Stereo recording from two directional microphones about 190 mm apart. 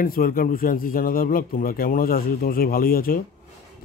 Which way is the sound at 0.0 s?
50° left (ahead or behind).